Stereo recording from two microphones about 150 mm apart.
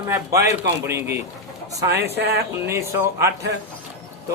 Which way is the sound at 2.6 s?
20° right (ahead or behind).